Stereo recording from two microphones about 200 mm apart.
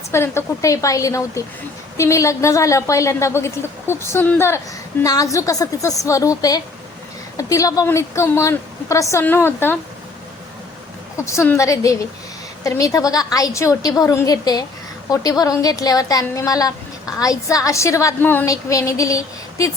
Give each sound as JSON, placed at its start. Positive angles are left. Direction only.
{"t": 0.1, "sound": "a woman's voice", "side_deg": 10}
{"t": 11.3, "sound": "a woman's voice", "side_deg": 15}